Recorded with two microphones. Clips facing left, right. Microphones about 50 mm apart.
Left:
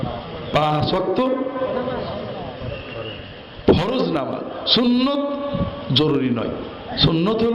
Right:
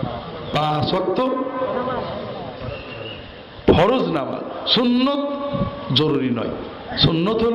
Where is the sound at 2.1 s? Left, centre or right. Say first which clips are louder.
Even; left.